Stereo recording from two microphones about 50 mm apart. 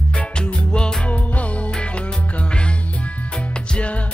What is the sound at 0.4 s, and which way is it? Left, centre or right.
Music, centre.